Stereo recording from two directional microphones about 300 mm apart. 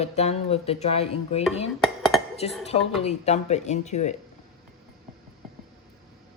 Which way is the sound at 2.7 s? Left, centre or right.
Left.